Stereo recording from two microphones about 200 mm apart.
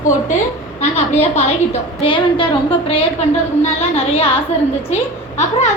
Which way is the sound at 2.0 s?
25° left (ahead or behind).